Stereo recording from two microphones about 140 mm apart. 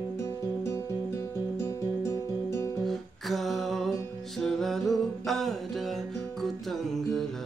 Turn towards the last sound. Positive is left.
turn(degrees=0)  # may be behind; listen again after turning